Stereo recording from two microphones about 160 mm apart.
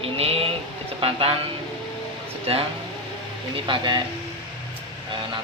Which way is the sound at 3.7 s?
30° right (ahead or behind).